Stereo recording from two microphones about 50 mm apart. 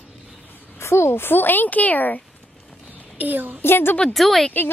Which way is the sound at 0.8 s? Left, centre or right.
Left.